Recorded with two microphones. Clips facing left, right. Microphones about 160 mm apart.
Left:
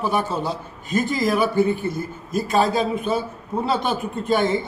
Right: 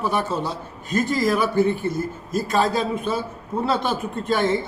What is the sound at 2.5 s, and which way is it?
A man's voice, centre (ahead or behind).